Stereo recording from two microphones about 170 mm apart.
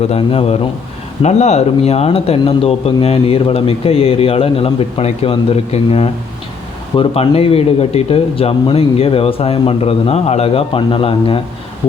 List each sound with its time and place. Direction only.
0.1 s speech: 35° left (ahead or behind)